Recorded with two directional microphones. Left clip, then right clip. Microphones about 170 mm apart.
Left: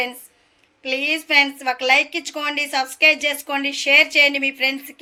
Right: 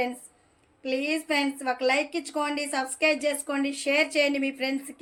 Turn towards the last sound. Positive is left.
turn(degrees=-35)  # may be behind; listen again after turning